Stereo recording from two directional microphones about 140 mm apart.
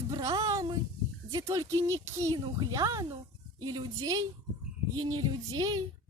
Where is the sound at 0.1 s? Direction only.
25° right (ahead or behind).